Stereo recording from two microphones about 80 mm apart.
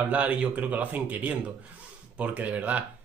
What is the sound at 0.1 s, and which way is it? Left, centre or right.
A man's voice, centre.